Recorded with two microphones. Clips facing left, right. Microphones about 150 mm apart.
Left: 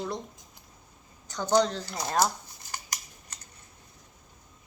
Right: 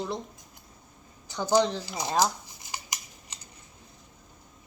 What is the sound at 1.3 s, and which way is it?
Speech, 10° right (ahead or behind).